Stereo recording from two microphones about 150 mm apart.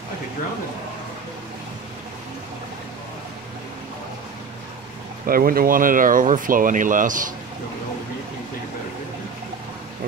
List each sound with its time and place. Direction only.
5.2 s speech: 75° right (ahead or behind)